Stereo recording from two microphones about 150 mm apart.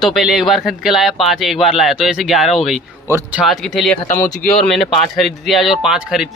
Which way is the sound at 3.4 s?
Centre (ahead or behind).